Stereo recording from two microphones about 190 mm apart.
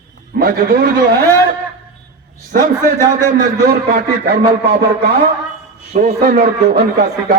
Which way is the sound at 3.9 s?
55° right (ahead or behind).